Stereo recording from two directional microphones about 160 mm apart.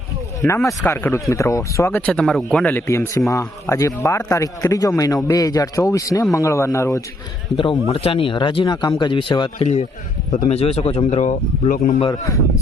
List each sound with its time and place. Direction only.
0.4 s a man's voice: 20° left (ahead or behind)
7.5 s speech: 35° left (ahead or behind)
10.5 s speech: 40° left (ahead or behind)